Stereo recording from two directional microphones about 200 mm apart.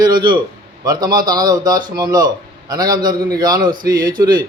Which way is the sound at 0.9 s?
20° right (ahead or behind).